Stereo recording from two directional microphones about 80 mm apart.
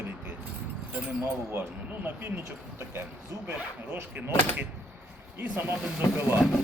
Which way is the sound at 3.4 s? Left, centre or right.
Right.